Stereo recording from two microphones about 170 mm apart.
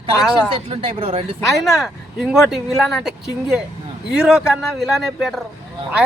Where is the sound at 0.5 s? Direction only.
30° right (ahead or behind).